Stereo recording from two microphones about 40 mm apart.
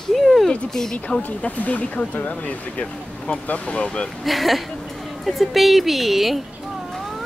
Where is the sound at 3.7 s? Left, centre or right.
Left.